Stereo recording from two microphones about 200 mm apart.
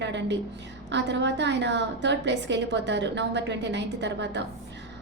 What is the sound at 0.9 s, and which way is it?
A woman's voice, 60° right (ahead or behind).